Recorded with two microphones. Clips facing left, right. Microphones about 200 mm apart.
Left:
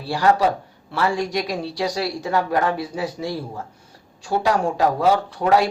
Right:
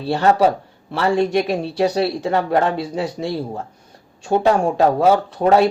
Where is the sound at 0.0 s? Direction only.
25° right (ahead or behind).